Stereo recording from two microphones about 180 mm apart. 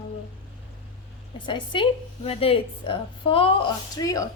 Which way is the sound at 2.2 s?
30° left (ahead or behind).